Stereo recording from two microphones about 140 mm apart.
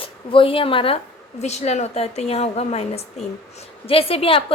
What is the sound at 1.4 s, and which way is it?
A woman's voice, 50° left (ahead or behind).